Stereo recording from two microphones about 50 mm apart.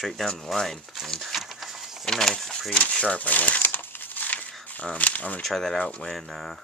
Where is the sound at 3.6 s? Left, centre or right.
Left.